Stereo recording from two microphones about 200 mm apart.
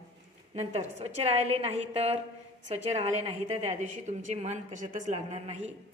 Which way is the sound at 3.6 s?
35° right (ahead or behind).